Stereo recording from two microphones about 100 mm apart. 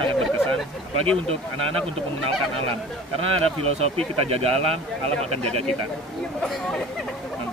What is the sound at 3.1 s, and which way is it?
Speech, 75° right (ahead or behind).